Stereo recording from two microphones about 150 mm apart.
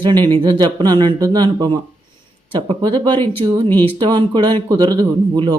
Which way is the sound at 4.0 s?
30° right (ahead or behind).